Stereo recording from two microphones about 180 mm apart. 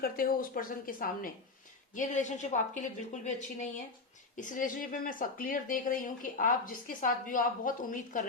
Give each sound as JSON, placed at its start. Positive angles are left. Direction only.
{"t": 0.0, "sound": "speech", "side_deg": 55}